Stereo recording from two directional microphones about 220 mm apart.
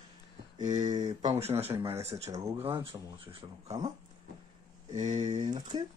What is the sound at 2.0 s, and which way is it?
Speech, 30° right (ahead or behind).